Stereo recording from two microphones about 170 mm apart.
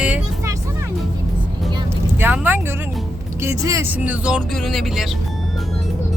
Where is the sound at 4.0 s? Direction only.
5° right (ahead or behind).